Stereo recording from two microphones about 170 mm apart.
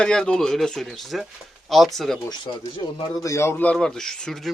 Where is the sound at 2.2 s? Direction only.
30° left (ahead or behind); by 4.4 s 5° left (ahead or behind).